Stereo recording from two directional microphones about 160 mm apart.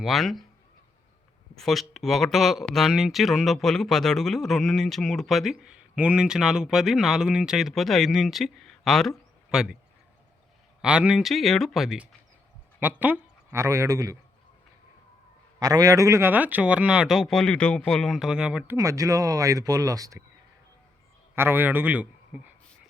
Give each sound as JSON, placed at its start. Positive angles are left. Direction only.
{"t": 0.0, "sound": "speech", "side_deg": 0}
{"t": 1.5, "sound": "speech", "side_deg": 0}
{"t": 10.8, "sound": "speech", "side_deg": -5}
{"t": 15.5, "sound": "speech", "side_deg": -25}
{"t": 18.8, "sound": "speech", "side_deg": -20}
{"t": 21.3, "sound": "a man's voice", "side_deg": -15}